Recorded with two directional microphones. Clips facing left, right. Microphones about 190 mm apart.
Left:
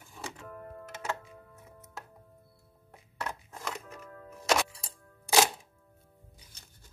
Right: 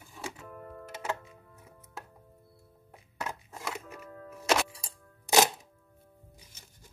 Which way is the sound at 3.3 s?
5° right (ahead or behind).